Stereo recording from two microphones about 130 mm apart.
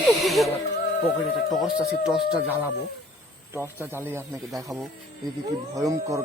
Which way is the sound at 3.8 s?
15° right (ahead or behind).